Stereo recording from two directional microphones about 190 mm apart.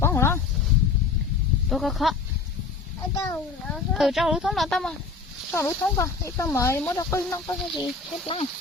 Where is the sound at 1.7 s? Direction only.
Centre (ahead or behind).